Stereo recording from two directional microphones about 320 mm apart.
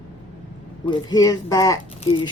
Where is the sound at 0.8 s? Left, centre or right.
Centre.